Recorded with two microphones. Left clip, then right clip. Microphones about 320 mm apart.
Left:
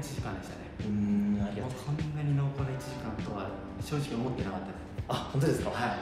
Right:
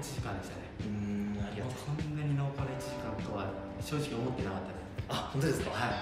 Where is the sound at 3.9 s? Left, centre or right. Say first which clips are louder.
Left 1 dB; centre.